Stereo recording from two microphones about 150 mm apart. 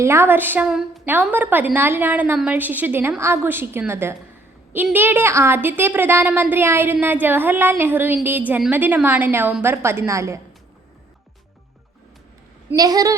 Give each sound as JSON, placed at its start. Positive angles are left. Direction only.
{"t": 0.0, "sound": "a woman's voice", "side_deg": -15}
{"t": 12.7, "sound": "a woman's voice", "side_deg": -25}